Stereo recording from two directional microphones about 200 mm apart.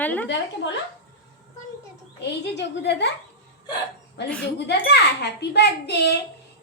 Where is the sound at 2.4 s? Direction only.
60° left (ahead or behind).